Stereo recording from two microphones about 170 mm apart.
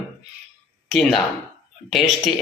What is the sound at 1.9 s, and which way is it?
Speech, centre (ahead or behind).